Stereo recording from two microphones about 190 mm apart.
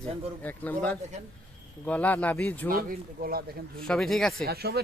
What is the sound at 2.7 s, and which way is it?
Speech, 50° right (ahead or behind).